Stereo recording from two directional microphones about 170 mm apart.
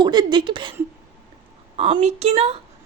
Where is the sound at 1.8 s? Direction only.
35° right (ahead or behind).